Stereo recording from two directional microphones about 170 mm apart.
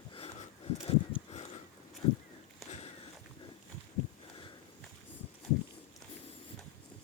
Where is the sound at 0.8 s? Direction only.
35° left (ahead or behind).